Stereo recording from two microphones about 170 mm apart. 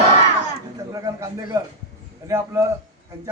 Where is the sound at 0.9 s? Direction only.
20° right (ahead or behind).